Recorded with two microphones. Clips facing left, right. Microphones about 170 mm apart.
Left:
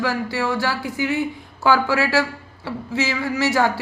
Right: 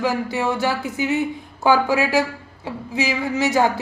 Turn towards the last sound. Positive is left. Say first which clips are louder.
# right 1 dB
turn(degrees=-20)  # may be behind; listen again after turning